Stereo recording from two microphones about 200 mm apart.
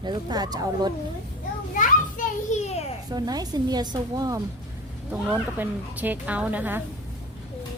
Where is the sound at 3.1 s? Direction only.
20° right (ahead or behind).